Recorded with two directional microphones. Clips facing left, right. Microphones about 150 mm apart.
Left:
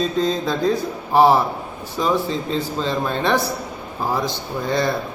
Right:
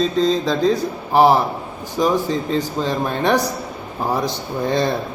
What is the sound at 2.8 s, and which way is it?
Speech, 10° right (ahead or behind).